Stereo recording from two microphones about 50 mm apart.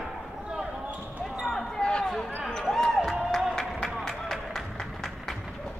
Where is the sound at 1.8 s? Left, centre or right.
Centre.